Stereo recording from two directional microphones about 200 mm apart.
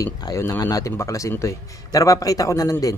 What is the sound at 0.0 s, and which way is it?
A man's voice, 15° left (ahead or behind).